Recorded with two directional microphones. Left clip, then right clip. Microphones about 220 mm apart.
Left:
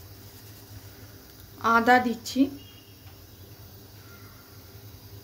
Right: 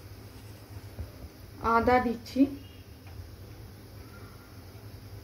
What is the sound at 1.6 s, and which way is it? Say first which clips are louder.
Speech: left 4 dB; 50° left (ahead or behind).